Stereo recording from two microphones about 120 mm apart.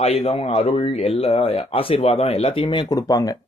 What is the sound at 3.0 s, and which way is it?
Speech, 30° left (ahead or behind).